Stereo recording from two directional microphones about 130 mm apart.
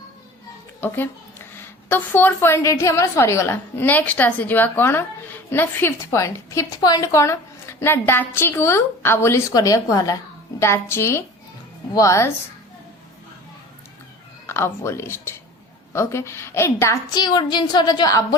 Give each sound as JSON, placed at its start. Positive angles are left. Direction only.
{"t": 0.8, "sound": "a woman's voice", "side_deg": 15}
{"t": 14.4, "sound": "a woman's voice", "side_deg": 20}
{"t": 17.2, "sound": "a woman's voice", "side_deg": 35}